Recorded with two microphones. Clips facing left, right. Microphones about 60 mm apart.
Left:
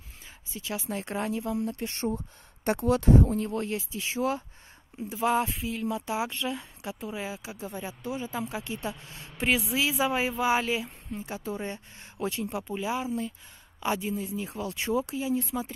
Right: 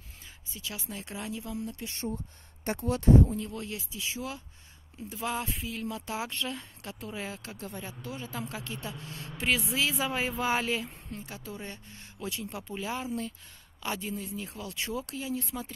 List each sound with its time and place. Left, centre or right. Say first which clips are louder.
0.5 s speech: left 7 dB; left
1.9 s speech: left 5 dB; left
2.7 s speech: left 6 dB; left
3.3 s a woman's voice: left 7 dB; left; by 11.2 s centre
11.2 s speech: left 10 dB; left
12.6 s a woman's voice: left 2 dB; centre
13.7 s a woman's voice: left 5 dB; centre
14.5 s speech: left 8 dB; left